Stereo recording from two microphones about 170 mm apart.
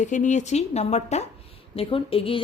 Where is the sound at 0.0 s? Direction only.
45° left (ahead or behind).